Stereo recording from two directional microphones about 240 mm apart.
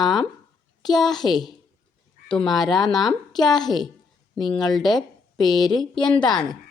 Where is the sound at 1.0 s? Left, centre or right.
Centre.